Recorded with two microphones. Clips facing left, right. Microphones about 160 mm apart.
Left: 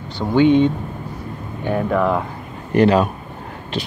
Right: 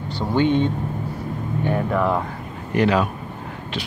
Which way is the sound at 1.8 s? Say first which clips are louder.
Left 4 dB; centre (ahead or behind).